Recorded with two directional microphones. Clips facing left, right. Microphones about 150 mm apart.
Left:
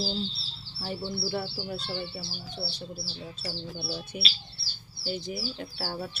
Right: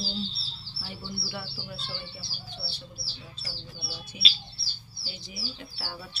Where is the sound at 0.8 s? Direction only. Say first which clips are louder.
Left 7 dB; 40° left (ahead or behind).